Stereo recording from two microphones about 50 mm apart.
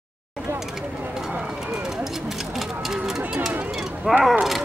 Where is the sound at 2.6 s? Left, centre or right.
Centre.